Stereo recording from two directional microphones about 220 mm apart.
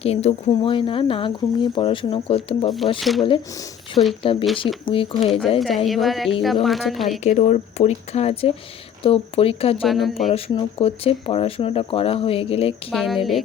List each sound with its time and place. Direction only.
0.0 s speech: 30° left (ahead or behind)
2.6 s a woman's voice: centre (ahead or behind)
3.2 s speech: 20° left (ahead or behind)
5.2 s a woman's voice: centre (ahead or behind)
7.3 s speech: 30° left (ahead or behind)
9.8 s a woman's voice: centre (ahead or behind)
10.2 s speech: 25° left (ahead or behind)
12.9 s a woman's voice: centre (ahead or behind)